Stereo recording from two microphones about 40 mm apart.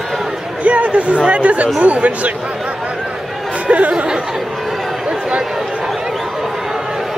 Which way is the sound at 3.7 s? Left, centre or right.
Right.